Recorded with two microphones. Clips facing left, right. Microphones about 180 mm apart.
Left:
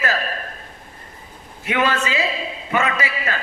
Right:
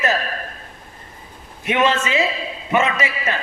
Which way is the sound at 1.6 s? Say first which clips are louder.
Right 2 dB; 20° right (ahead or behind).